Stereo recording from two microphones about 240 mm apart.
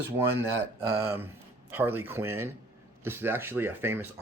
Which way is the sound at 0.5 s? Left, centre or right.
Centre.